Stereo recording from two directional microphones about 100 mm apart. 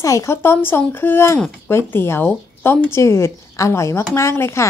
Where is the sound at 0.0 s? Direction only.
30° left (ahead or behind).